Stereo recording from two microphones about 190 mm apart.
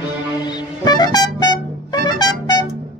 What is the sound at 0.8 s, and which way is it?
Music, 20° left (ahead or behind).